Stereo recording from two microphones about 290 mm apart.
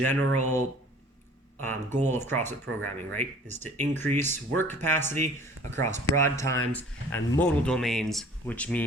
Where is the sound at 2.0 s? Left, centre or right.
Centre.